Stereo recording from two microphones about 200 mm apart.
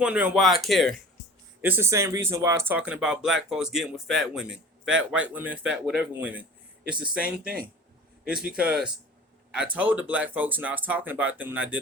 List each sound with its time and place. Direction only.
0.0 s speech: 5° right (ahead or behind)
1.6 s speech: 10° right (ahead or behind)